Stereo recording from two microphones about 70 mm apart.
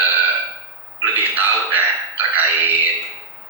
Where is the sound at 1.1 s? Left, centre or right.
Right.